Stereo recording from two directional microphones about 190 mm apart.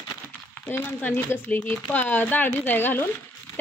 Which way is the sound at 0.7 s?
10° left (ahead or behind).